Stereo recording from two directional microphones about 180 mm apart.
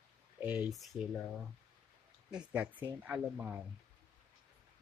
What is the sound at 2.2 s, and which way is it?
Speech, 5° right (ahead or behind).